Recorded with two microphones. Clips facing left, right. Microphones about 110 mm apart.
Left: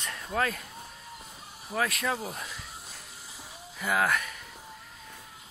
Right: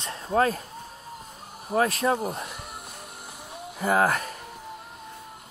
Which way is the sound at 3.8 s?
35° right (ahead or behind).